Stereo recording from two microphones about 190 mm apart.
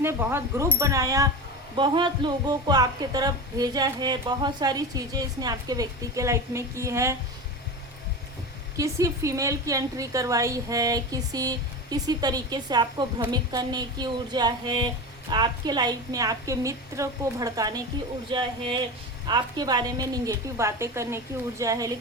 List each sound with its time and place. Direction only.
0.0 s speech: 10° right (ahead or behind)
8.7 s speech: 15° right (ahead or behind)